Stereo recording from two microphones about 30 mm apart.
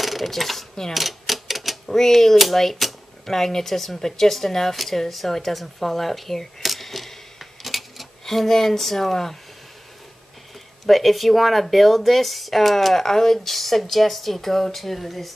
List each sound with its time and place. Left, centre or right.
0.0 s speech: centre
0.9 s typewriter: centre
1.9 s speech: centre
6.7 s camera: centre
7.6 s a sound: centre
8.3 s speech: centre
10.9 s speech: centre